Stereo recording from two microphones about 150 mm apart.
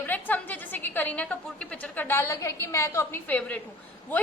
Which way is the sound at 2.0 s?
15° left (ahead or behind).